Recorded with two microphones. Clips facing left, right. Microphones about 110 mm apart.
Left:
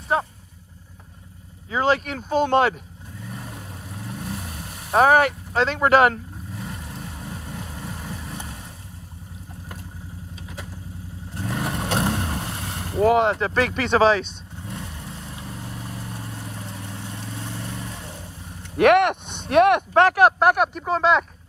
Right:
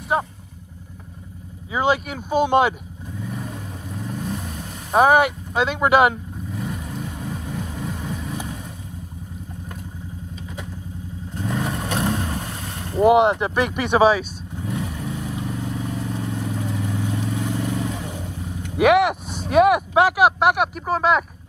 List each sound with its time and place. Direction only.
0.1 s speech: 15° right (ahead or behind)
1.7 s speech: 10° right (ahead or behind)
3.2 s vehicle: centre (ahead or behind)
5.0 s speech: 10° right (ahead or behind)
6.5 s vehicle: centre (ahead or behind)
11.3 s vehicle: centre (ahead or behind)
12.0 s boat: centre (ahead or behind)
13.0 s speech: 15° right (ahead or behind)
15.0 s vehicle: 5° right (ahead or behind)
17.6 s vehicle: 75° right (ahead or behind)
18.5 s speech: 5° right (ahead or behind)